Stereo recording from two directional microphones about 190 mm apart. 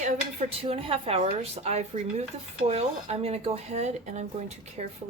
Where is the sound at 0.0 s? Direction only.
35° right (ahead or behind).